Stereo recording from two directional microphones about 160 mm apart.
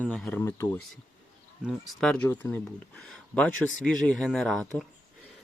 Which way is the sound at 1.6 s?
Centre (ahead or behind).